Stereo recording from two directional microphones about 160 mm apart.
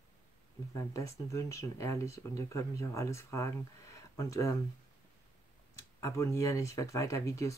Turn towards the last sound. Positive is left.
turn(degrees=20)  # may be behind; listen again after turning